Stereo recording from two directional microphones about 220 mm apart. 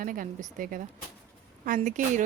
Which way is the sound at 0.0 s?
40° right (ahead or behind).